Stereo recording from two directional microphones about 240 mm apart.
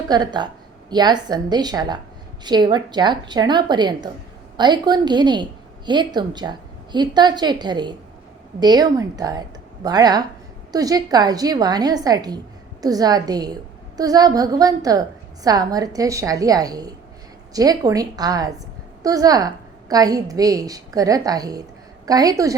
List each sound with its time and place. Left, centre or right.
0.1 s a woman's voice: centre